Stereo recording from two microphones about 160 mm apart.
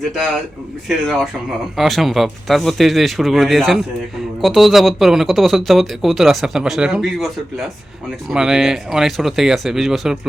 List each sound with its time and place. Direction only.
0.9 s speech: centre (ahead or behind)